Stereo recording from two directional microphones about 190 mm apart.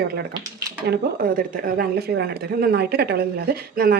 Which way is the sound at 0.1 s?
55° right (ahead or behind).